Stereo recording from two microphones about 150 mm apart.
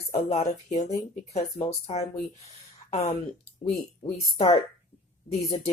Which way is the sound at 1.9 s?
40° left (ahead or behind).